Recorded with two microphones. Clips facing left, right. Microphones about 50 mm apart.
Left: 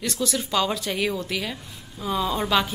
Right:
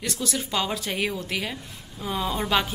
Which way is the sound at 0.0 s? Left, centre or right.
Right.